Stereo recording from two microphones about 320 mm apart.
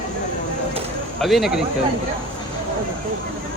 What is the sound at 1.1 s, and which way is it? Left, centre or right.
Speech, centre.